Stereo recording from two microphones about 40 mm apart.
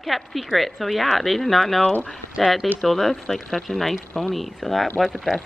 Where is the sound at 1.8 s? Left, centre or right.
Left.